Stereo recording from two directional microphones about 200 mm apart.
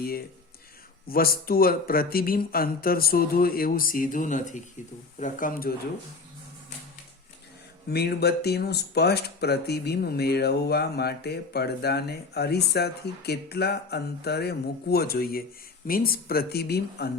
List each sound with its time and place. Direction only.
1.0 s speech: 50° left (ahead or behind)
7.9 s speech: 55° left (ahead or behind)